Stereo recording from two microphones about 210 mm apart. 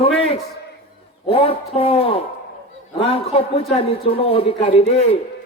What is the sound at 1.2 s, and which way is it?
A man's voice, 25° left (ahead or behind).